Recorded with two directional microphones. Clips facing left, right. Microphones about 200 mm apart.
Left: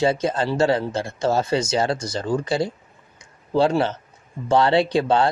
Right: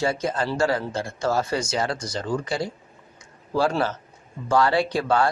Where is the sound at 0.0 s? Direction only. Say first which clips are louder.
Left 4 dB; 25° left (ahead or behind).